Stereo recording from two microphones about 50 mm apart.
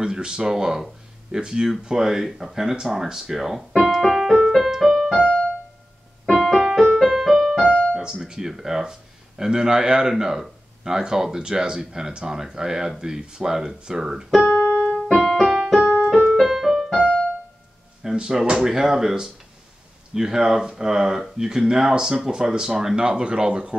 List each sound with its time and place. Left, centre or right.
0.0 s speech: centre
4.5 s music: centre
5.1 s keyboard: left
6.2 s keyboard: centre
6.8 s music: centre
7.6 s keyboard: left
7.9 s speech: centre
14.5 s keyboard: left
15.0 s music: centre
15.4 s keyboard: centre
15.8 s keyboard: centre
16.3 s music: centre
17.0 s keyboard: left
18.1 s speech: centre